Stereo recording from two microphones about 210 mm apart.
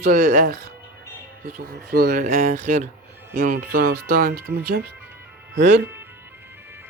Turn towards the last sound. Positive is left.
turn(degrees=-10)  # may be behind; listen again after turning